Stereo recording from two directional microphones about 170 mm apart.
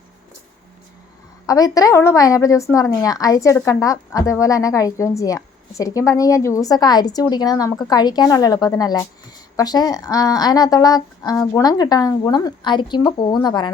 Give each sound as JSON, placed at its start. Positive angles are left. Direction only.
{"t": 1.5, "sound": "a woman's voice", "side_deg": 20}